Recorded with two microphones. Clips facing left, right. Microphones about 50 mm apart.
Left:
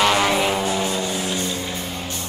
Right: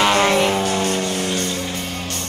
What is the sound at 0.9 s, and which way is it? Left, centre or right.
Music, right.